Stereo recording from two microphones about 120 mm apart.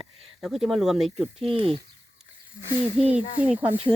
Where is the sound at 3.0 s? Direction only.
5° right (ahead or behind).